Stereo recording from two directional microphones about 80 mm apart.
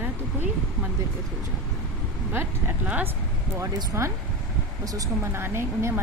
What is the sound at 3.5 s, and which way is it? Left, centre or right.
Speech, right.